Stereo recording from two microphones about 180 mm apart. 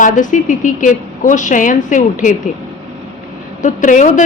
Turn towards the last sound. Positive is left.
turn(degrees=45)  # may be behind; listen again after turning